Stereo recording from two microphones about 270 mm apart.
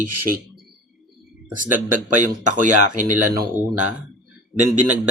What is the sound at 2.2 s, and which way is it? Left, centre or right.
Speech, right.